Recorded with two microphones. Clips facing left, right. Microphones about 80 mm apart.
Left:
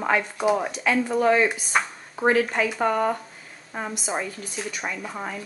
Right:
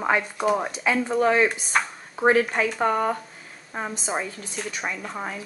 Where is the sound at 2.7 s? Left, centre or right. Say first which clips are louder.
Even; right.